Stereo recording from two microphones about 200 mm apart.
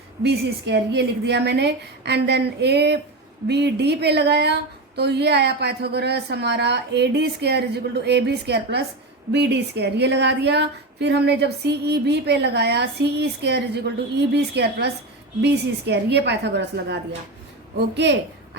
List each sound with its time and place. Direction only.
0.2 s speech: 55° right (ahead or behind)